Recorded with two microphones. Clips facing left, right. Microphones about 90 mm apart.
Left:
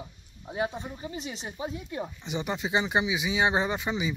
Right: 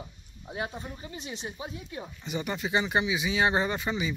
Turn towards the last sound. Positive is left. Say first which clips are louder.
# left 1 dB
turn(degrees=10)  # may be behind; listen again after turning